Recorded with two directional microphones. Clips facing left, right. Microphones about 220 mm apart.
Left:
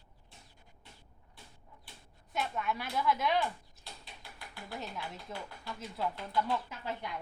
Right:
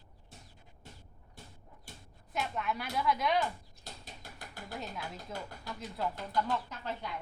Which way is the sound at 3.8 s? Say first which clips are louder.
Right 4 dB; 45° right (ahead or behind).